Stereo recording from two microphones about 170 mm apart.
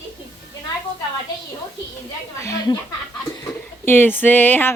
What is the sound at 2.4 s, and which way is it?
Speech, 20° left (ahead or behind).